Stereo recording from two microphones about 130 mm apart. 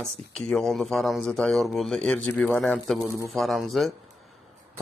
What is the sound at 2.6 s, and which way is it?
Speech, 5° left (ahead or behind).